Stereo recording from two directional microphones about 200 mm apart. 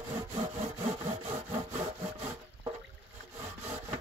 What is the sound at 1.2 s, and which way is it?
Sawing, 30° right (ahead or behind).